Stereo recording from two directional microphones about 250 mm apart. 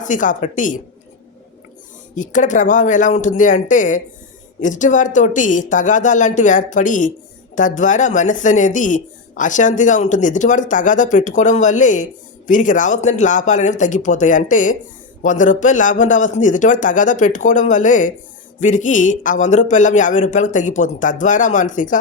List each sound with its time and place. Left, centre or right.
0.0 s a man's voice: left
2.1 s a man's voice: left